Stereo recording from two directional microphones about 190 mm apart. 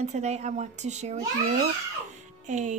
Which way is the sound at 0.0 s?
35° right (ahead or behind).